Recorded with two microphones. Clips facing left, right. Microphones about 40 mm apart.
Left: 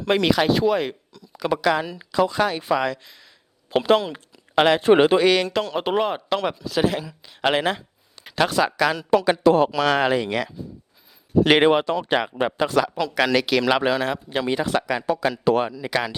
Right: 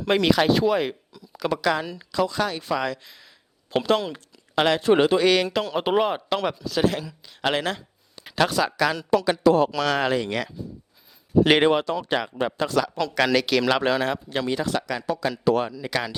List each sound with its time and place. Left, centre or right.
0.0 s speech: centre
1.5 s speech: centre
2.8 s speech: centre
4.8 s speech: left
5.2 s speech: centre
8.2 s speech: centre
9.1 s speech: centre
9.4 s speech: left
9.7 s speech: centre
11.6 s speech: centre
14.3 s speech: centre
15.7 s speech: centre